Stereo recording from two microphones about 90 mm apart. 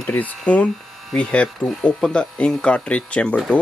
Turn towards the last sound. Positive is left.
turn(degrees=10)  # may be behind; listen again after turning